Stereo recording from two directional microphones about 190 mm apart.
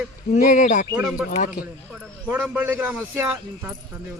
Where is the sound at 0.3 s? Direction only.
40° left (ahead or behind).